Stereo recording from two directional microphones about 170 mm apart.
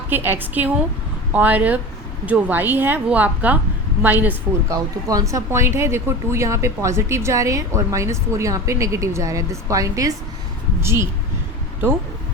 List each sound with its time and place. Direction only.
0.1 s a woman's voice: 10° right (ahead or behind)